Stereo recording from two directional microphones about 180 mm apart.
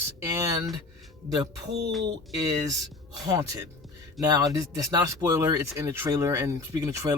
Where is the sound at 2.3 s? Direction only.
20° right (ahead or behind).